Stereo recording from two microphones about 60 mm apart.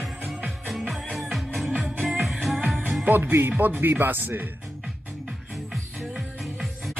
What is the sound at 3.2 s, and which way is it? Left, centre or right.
Speech, right.